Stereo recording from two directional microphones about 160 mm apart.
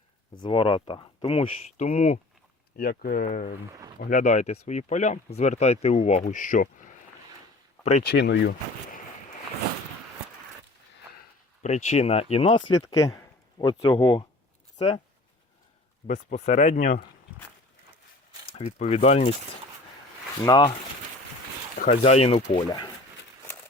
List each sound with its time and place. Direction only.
0.4 s speech: 30° left (ahead or behind)
2.7 s speech: 70° left (ahead or behind)
3.7 s speech: 20° right (ahead or behind)
4.0 s speech: 50° left (ahead or behind)
8.0 s speech: 90° left
11.6 s speech: 45° left (ahead or behind)
12.8 s speech: 20° left (ahead or behind)
16.0 s speech: 45° left (ahead or behind)
18.4 s speech: 40° left (ahead or behind)
20.4 s speech: 25° left (ahead or behind)
22.0 s speech: 40° left (ahead or behind)